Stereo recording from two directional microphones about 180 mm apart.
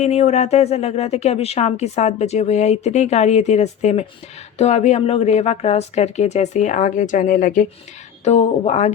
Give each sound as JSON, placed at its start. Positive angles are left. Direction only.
{"t": 0.0, "sound": "speech", "side_deg": 35}